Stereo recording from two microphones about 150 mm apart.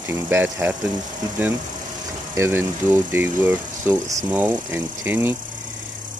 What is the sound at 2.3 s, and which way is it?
Speech, 15° right (ahead or behind).